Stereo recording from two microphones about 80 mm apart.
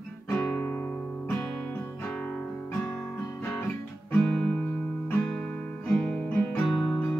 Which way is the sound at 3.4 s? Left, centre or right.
Left.